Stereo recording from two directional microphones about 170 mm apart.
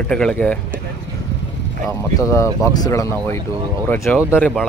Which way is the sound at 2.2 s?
15° left (ahead or behind).